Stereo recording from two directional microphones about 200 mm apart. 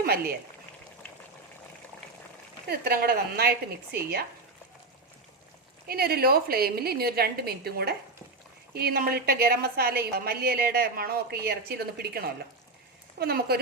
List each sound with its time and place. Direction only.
0.0 s speech: 50° right (ahead or behind)
2.6 s a woman's voice: 50° right (ahead or behind)
5.9 s a woman's voice: 50° right (ahead or behind)